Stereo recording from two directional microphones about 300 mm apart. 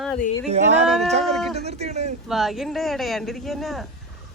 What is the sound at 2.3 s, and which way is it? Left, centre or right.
Speech, centre.